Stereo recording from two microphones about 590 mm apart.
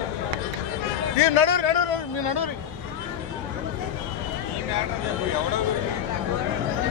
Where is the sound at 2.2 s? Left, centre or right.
Left.